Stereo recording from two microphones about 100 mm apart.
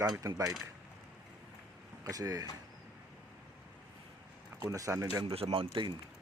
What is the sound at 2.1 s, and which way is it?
Speech, 40° right (ahead or behind).